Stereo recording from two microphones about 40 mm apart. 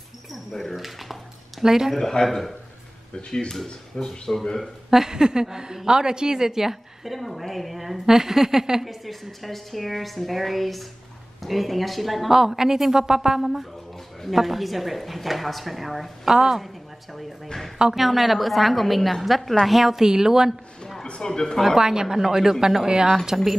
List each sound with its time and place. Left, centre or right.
0.3 s dog: centre
0.7 s a woman's voice: centre
2.0 s speech: centre
3.2 s a woman's voice: centre
4.9 s a woman's voice: centre
8.8 s a woman's voice: centre
16.3 s speech: centre
17.9 s a woman's voice: centre
21.0 s speech: centre
21.7 s speech: centre